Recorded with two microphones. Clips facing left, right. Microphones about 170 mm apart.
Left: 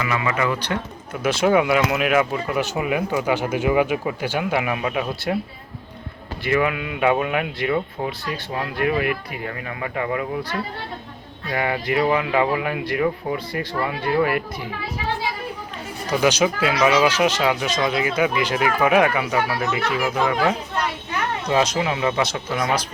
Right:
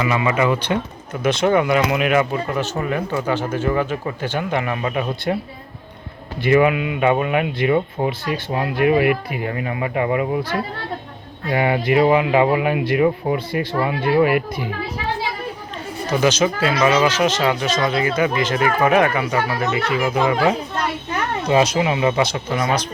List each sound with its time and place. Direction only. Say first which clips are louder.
0.0 s speech: right 4 dB; 25° right (ahead or behind)
1.2 s speech: right 1 dB; 5° left (ahead or behind)
6.5 s a man's voice: right 6 dB; 15° right (ahead or behind)
7.0 s speech: right 2 dB; centre (ahead or behind)
7.7 s speech: right 5 dB; 20° right (ahead or behind)
11.5 s speech: right 5 dB; 20° right (ahead or behind)
16.2 s speech: right 1 dB; 10° left (ahead or behind)
21.5 s speech: right 4 dB; 10° right (ahead or behind)